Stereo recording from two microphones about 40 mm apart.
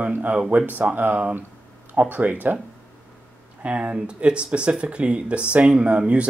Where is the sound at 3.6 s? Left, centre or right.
Right.